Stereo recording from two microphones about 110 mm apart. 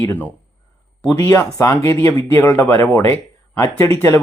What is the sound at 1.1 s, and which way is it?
Speech, 25° left (ahead or behind).